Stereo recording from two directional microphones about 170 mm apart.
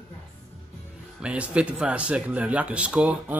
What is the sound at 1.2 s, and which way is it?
Speech, 5° right (ahead or behind).